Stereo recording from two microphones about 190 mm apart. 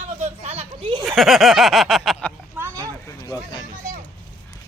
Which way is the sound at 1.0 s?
Centre (ahead or behind).